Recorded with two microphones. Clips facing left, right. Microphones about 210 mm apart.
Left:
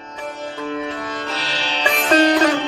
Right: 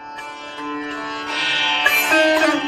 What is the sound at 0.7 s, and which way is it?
Music, 45° left (ahead or behind).